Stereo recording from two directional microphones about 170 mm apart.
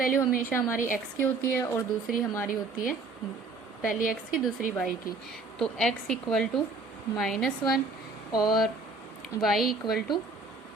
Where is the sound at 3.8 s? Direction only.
55° left (ahead or behind).